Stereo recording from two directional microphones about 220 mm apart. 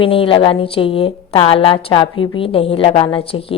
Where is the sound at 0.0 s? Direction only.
25° left (ahead or behind).